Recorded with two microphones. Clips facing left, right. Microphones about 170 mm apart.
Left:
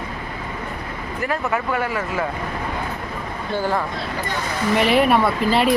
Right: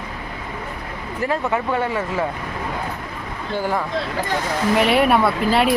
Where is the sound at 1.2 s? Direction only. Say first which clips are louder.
Right 2 dB; 25° right (ahead or behind).